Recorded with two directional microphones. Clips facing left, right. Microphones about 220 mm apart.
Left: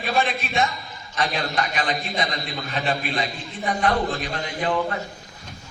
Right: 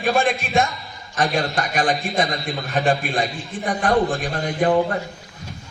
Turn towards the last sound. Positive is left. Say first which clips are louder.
# right 6 dB
turn(degrees=-45)  # may be behind; listen again after turning